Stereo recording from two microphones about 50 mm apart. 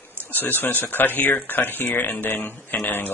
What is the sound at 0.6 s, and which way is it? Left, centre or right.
Speech, left.